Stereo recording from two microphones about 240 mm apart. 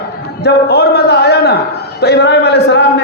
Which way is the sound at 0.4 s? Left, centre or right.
Left.